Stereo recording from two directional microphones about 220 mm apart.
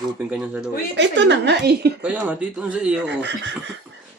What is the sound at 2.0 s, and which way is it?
Speech, 5° right (ahead or behind).